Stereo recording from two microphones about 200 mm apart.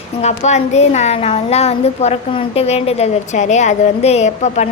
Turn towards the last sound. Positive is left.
turn(degrees=35)  # may be behind; listen again after turning